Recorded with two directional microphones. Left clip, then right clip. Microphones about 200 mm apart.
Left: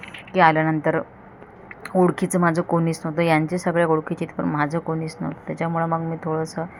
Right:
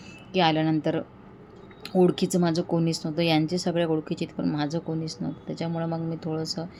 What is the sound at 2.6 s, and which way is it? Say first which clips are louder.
Speech: left 5 dB; 20° left (ahead or behind).